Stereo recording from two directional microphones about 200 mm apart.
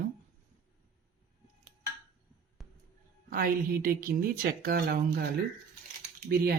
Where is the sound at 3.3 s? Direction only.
45° right (ahead or behind).